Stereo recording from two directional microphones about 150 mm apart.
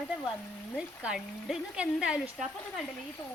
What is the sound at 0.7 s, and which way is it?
Speech, 5° right (ahead or behind).